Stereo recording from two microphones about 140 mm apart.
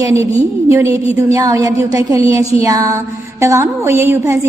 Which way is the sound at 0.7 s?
20° right (ahead or behind).